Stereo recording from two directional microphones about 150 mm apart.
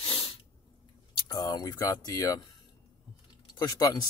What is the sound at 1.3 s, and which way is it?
Speech, 25° left (ahead or behind).